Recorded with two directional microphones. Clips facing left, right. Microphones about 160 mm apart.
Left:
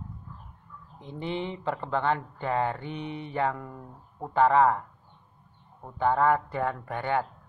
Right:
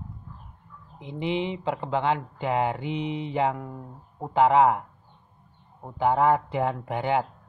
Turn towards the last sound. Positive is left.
turn(degrees=-15)  # may be behind; listen again after turning